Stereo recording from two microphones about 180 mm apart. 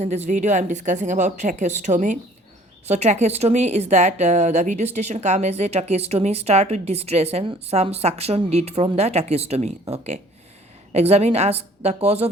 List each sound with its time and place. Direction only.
0.0 s a woman's voice: 40° right (ahead or behind)